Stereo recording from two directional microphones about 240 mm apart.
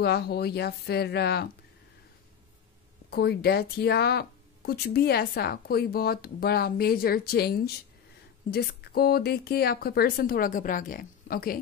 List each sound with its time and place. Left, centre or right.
0.0 s speech: left
3.1 s speech: left